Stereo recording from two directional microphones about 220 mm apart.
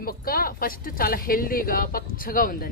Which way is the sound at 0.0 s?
45° left (ahead or behind).